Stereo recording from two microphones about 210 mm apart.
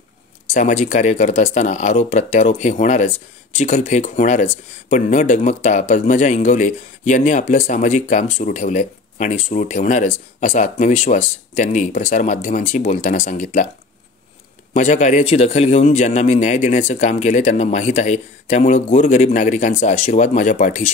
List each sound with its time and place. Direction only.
0.5 s speech: 35° left (ahead or behind)
14.7 s speech: 35° left (ahead or behind)